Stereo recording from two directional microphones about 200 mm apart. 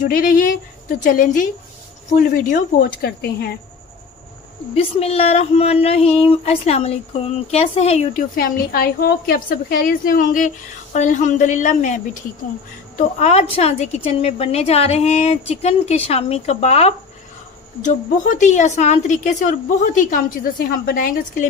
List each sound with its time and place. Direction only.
0.0 s speech: 45° left (ahead or behind)
4.7 s a woman's voice: 30° left (ahead or behind)
8.4 s a woman's voice: 45° left (ahead or behind)